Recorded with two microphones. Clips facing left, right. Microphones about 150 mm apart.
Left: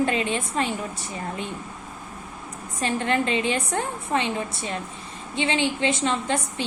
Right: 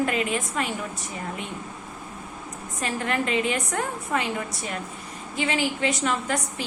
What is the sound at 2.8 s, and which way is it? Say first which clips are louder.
A woman's voice: left 3 dB; 30° left (ahead or behind).